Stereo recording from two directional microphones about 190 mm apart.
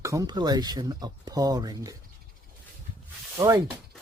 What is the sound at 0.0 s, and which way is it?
Speech, 15° right (ahead or behind).